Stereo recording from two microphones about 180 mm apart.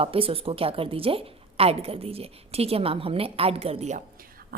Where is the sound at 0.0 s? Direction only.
30° right (ahead or behind).